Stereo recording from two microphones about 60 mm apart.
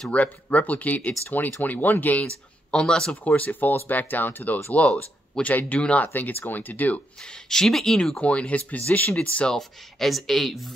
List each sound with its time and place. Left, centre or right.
0.1 s speech: left
2.2 s speech: centre
6.0 s speech: left
7.4 s speech: centre
8.2 s speech: left
9.5 s speech: centre